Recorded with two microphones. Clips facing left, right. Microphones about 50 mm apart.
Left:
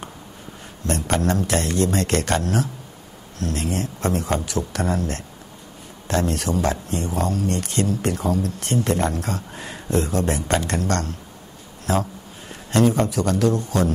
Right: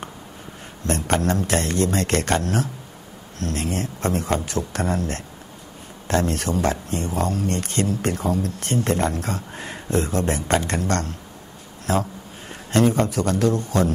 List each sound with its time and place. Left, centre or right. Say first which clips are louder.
0.8 s a man's voice: even; right